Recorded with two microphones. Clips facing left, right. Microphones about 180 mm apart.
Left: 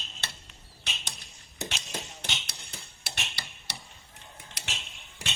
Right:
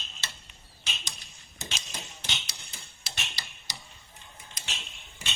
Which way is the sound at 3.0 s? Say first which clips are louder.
Left 1 dB; 65° left (ahead or behind).